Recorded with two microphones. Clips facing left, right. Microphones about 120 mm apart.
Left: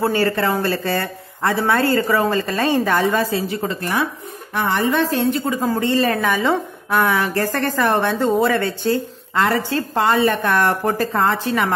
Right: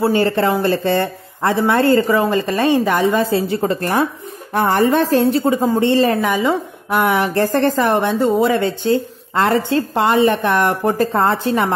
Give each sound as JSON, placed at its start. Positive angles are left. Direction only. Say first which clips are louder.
{"t": 0.0, "sound": "speech", "louder": "right 3 dB", "side_deg": -20}
{"t": 3.3, "sound": "speech", "louder": "right 5 dB", "side_deg": -30}
{"t": 6.2, "sound": "a woman's voice", "louder": "right 1 dB", "side_deg": -15}